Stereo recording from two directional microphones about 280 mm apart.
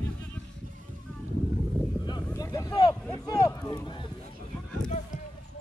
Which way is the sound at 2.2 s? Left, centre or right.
Centre.